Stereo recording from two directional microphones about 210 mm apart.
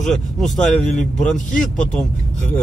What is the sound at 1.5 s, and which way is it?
Speech, 40° left (ahead or behind).